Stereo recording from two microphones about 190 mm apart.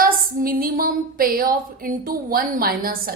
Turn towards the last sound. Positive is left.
turn(degrees=-50)  # may be behind; listen again after turning